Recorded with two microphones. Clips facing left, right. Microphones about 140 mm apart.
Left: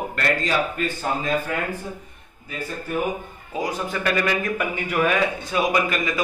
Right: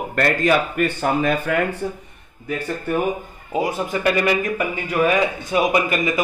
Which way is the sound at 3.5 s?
20° right (ahead or behind).